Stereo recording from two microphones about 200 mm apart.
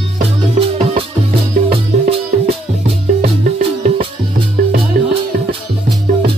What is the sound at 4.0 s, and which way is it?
Music, 25° right (ahead or behind).